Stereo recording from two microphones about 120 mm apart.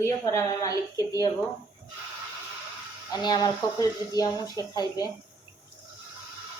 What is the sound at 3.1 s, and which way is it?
A woman's voice, 35° left (ahead or behind).